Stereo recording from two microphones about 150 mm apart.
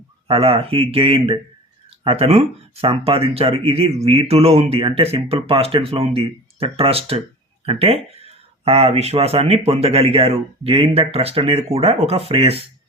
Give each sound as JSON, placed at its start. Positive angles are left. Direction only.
{"t": 0.3, "sound": "speech", "side_deg": -40}